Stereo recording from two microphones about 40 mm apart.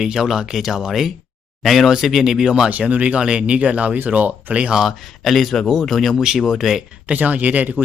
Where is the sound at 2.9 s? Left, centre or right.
Right.